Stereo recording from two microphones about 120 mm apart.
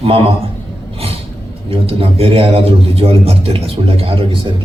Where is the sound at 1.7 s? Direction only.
50° right (ahead or behind).